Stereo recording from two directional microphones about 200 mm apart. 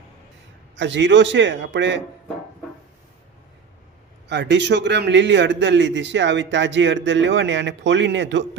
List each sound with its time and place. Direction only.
0.8 s a man's voice: 65° right (ahead or behind)
4.3 s a man's voice: 60° right (ahead or behind)